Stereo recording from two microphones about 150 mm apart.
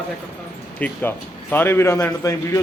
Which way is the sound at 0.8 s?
10° left (ahead or behind).